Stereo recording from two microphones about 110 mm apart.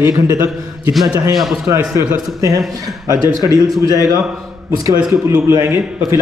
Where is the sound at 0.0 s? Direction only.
25° right (ahead or behind).